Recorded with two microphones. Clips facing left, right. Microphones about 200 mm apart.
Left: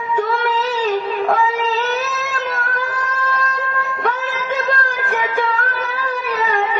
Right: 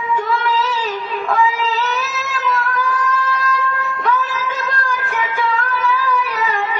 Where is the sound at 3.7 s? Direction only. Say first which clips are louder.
Right 2 dB; 45° left (ahead or behind).